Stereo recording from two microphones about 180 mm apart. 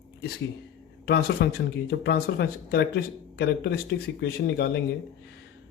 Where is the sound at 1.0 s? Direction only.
60° left (ahead or behind).